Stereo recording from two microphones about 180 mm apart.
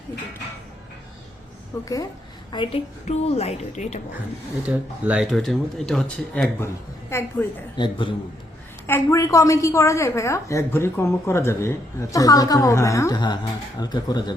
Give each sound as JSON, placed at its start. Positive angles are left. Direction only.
{"t": 1.8, "sound": "a woman's voice", "side_deg": 20}
{"t": 4.6, "sound": "a woman's voice", "side_deg": -5}
{"t": 7.8, "sound": "a woman's voice", "side_deg": 25}
{"t": 8.9, "sound": "a woman's voice", "side_deg": 15}